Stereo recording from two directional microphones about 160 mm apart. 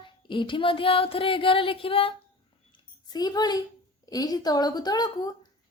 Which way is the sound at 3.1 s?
25° left (ahead or behind).